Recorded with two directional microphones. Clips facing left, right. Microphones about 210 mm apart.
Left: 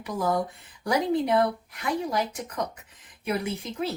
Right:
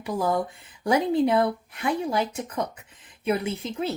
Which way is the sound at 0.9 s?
25° right (ahead or behind).